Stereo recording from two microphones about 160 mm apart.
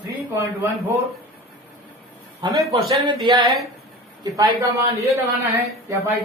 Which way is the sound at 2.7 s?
30° right (ahead or behind).